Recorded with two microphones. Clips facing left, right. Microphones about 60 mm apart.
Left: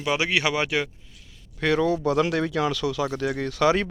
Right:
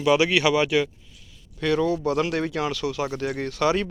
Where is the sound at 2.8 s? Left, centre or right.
Left.